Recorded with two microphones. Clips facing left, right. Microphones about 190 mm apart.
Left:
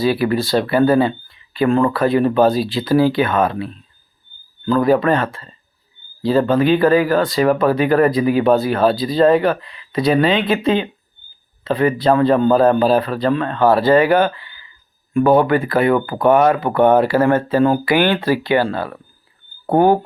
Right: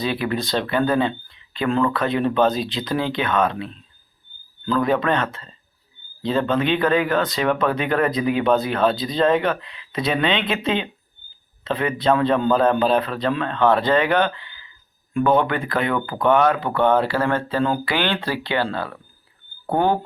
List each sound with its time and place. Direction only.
0.0 s speech: 5° left (ahead or behind)
1.6 s speech: 45° left (ahead or behind)
1.9 s speech: 5° left (ahead or behind)
4.8 s speech: 5° left (ahead or behind)